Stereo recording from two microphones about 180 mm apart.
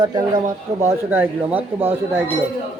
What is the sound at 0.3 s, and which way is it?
Speech, 45° right (ahead or behind).